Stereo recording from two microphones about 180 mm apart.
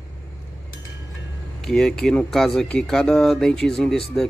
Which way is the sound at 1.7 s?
5° left (ahead or behind).